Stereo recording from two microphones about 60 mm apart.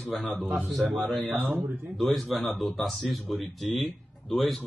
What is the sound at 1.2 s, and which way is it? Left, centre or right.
Speech, right.